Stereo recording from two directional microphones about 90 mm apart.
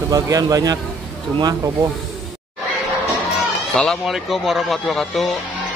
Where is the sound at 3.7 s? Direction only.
5° left (ahead or behind).